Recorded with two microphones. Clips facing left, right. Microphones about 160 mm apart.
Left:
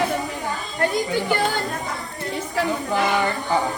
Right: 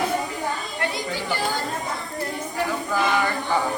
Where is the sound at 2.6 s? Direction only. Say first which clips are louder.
Left 4 dB; 90° left.